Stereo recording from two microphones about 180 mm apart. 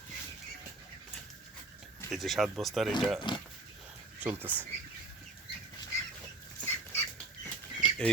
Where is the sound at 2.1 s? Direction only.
Centre (ahead or behind).